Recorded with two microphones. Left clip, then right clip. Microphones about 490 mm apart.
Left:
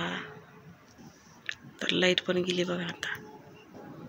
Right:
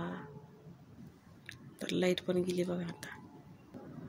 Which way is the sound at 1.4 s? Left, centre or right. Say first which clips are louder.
Left 9 dB; right.